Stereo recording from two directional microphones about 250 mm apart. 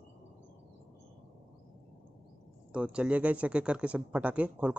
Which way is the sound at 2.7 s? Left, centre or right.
Centre.